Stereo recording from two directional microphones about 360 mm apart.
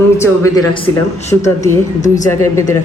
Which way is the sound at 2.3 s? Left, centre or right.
Centre.